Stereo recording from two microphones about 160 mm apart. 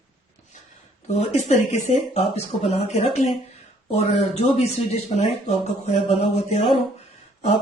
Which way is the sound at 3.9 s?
40° left (ahead or behind).